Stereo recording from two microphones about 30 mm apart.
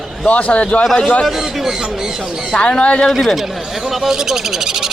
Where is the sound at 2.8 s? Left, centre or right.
Left.